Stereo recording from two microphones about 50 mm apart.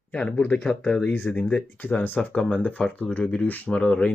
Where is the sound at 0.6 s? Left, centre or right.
Centre.